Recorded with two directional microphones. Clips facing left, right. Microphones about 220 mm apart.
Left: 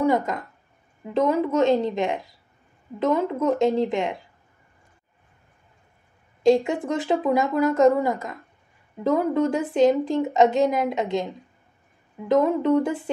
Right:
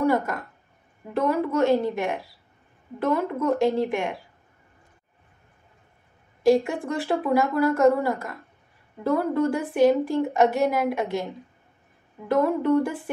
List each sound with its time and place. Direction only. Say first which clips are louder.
0.0 s a woman's voice: left 1 dB; 15° left (ahead or behind)
6.4 s a woman's voice: left 1 dB; 20° left (ahead or behind)